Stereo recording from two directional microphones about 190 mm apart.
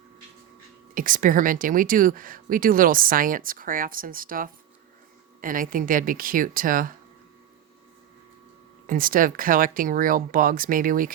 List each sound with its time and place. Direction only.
0.9 s speech: 45° right (ahead or behind)
8.9 s speech: 45° right (ahead or behind)